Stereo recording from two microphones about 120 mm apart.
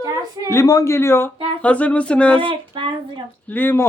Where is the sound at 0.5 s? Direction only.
30° left (ahead or behind); by 2.4 s 10° left (ahead or behind).